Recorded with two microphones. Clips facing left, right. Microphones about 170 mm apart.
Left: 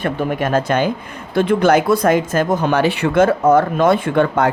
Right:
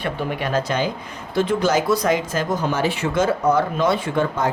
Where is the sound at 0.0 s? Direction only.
50° left (ahead or behind).